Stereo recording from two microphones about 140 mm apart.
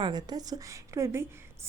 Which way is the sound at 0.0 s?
30° right (ahead or behind).